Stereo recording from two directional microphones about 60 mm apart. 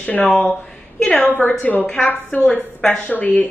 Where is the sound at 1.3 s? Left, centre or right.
Left.